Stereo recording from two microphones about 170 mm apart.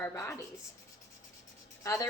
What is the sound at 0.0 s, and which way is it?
Speech, 15° left (ahead or behind).